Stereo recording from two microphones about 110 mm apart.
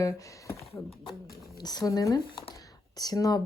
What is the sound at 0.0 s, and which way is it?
Speech, 30° left (ahead or behind).